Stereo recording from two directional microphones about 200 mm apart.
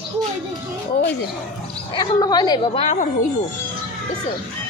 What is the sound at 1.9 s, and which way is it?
Speech, 20° left (ahead or behind).